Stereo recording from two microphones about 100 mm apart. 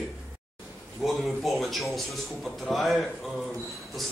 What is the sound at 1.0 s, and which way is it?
A man's voice, centre (ahead or behind).